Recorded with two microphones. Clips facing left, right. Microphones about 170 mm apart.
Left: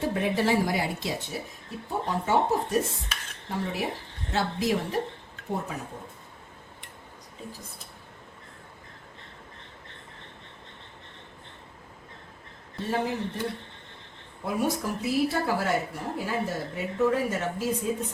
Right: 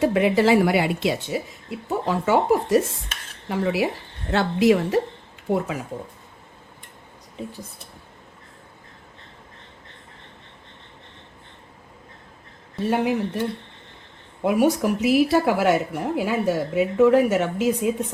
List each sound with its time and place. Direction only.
0.0 s a woman's voice: 90° right
4.3 s a woman's voice: 65° right (ahead or behind)
5.5 s speech: 90° right
12.9 s a woman's voice: 80° right
14.4 s a woman's voice: 75° right (ahead or behind)